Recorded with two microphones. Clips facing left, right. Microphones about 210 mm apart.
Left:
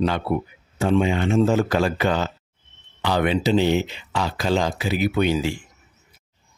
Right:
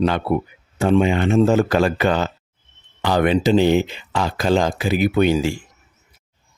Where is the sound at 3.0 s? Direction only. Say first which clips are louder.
Right 4 dB; 45° right (ahead or behind).